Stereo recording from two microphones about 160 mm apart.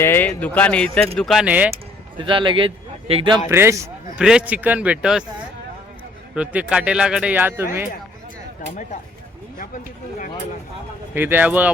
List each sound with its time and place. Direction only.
0.0 s speech: 15° left (ahead or behind); by 1.7 s 10° right (ahead or behind)
1.7 s speech: 30° right (ahead or behind)
3.5 s speech: 15° right (ahead or behind)
4.2 s speech: 5° right (ahead or behind)
6.3 s speech: 5° right (ahead or behind)
11.1 s speech: 10° right (ahead or behind)